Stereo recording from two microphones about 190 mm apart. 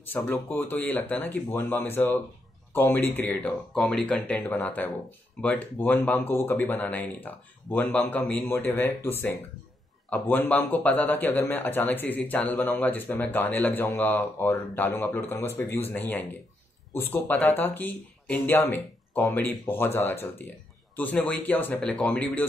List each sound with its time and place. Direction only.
0.0 s a man's voice: 10° left (ahead or behind)